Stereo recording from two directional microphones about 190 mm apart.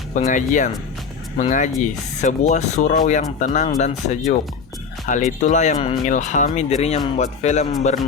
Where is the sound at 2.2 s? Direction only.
40° left (ahead or behind).